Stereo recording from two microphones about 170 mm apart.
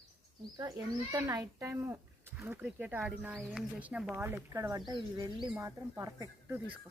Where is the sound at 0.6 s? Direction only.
20° right (ahead or behind).